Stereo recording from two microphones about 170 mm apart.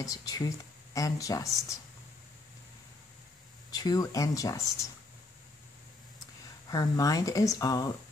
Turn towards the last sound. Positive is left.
turn(degrees=20)  # may be behind; listen again after turning